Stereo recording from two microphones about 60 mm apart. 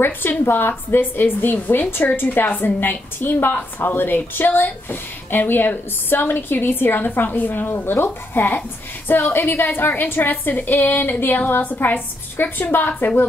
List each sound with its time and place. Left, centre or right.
0.0 s a woman's voice: left